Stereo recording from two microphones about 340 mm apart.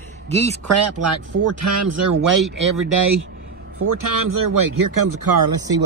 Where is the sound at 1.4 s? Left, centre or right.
Right.